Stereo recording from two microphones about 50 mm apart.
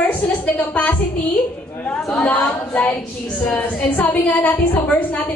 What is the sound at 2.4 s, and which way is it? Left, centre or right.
A woman's voice, left.